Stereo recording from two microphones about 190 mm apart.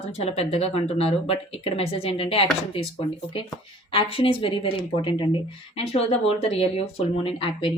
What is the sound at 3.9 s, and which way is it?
A woman's voice, 30° left (ahead or behind).